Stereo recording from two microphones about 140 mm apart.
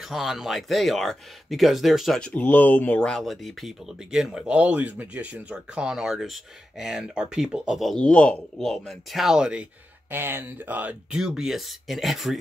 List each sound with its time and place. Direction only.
0.0 s speech: centre (ahead or behind)